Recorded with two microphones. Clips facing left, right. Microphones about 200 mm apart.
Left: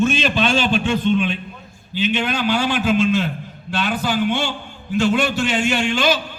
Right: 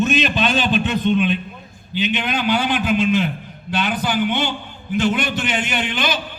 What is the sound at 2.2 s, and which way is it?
A man's voice, 20° right (ahead or behind).